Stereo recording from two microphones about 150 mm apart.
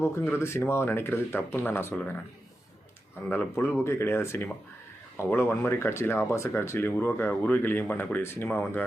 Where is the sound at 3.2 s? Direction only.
10° left (ahead or behind).